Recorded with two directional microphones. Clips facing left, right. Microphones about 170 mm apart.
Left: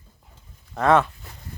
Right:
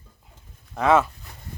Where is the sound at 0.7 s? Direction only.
Centre (ahead or behind).